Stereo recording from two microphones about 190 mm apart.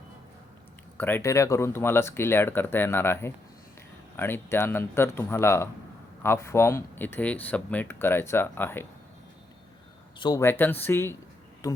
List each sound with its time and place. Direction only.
0.9 s speech: 10° left (ahead or behind)
10.2 s speech: 20° left (ahead or behind)